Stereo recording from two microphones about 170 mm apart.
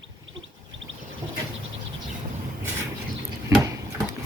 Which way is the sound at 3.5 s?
20° right (ahead or behind).